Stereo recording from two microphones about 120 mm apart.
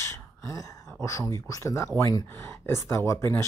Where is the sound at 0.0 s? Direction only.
20° left (ahead or behind).